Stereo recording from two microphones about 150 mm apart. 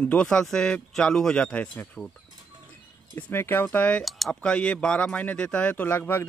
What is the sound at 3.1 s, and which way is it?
Speech, 15° left (ahead or behind).